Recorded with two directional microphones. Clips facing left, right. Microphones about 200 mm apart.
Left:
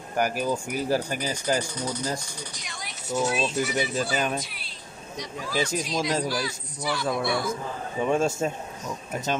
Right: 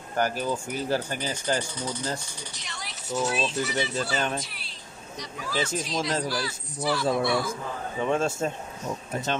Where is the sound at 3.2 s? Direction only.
5° right (ahead or behind).